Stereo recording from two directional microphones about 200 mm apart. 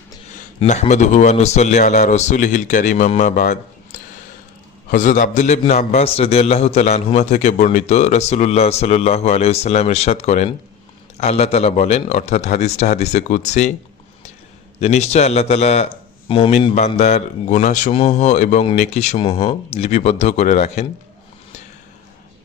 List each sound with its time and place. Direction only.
0.6 s a man's voice: 35° left (ahead or behind)
14.8 s a man's voice: 35° left (ahead or behind)